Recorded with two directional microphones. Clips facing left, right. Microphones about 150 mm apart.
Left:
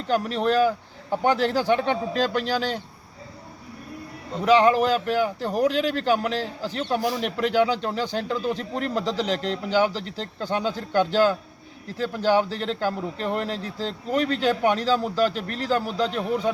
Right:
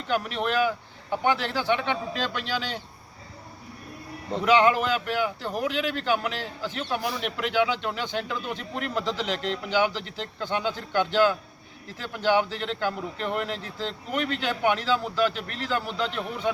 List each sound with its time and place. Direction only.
0.1 s speech: 35° left (ahead or behind)
4.4 s speech: 35° left (ahead or behind)